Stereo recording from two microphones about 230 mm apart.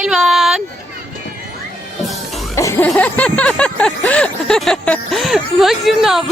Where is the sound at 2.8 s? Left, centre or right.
Centre.